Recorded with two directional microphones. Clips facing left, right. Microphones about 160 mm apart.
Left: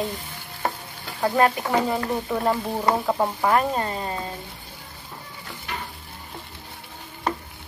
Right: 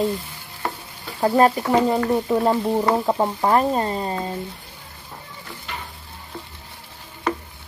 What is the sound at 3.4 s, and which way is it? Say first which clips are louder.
Speech: right 4 dB; 30° right (ahead or behind).